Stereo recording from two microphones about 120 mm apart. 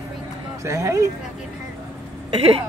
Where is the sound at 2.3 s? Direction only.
55° right (ahead or behind).